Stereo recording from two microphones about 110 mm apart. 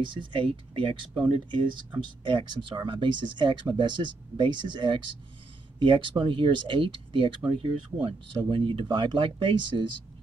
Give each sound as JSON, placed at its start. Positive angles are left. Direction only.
{"t": 0.0, "sound": "speech", "side_deg": -50}